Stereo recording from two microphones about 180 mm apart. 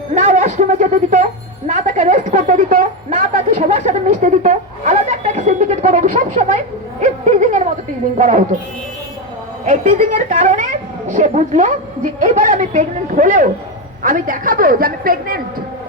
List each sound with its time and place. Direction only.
0.1 s a sound: 45° right (ahead or behind)
8.2 s a woman's voice: 45° right (ahead or behind)
9.6 s a woman's voice: 45° right (ahead or behind)